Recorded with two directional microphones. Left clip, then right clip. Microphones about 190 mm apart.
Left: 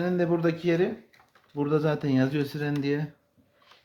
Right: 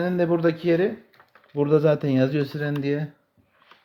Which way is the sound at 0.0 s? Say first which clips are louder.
Right 4 dB; 30° right (ahead or behind).